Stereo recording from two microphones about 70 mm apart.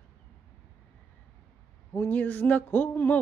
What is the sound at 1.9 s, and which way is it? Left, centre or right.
A man's voice, left.